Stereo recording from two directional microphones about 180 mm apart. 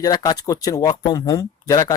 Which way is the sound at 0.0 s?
20° left (ahead or behind).